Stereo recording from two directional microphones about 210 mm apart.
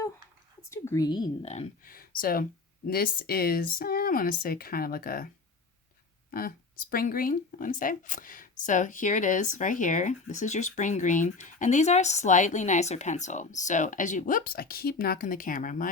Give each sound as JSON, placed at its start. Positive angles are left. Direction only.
{"t": 0.7, "sound": "a woman's voice", "side_deg": 15}
{"t": 1.8, "sound": "speech", "side_deg": 45}
{"t": 6.3, "sound": "speech", "side_deg": 40}